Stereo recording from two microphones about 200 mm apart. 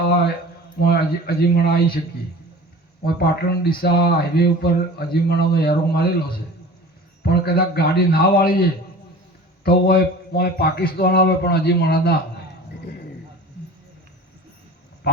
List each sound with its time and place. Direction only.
0.8 s speech: 55° left (ahead or behind)
3.2 s speech: 50° left (ahead or behind)
9.6 s speech: 50° left (ahead or behind)
12.9 s a sound: 50° left (ahead or behind)
15.1 s dog: 55° left (ahead or behind)